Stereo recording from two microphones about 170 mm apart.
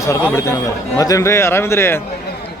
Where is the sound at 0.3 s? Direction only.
20° left (ahead or behind).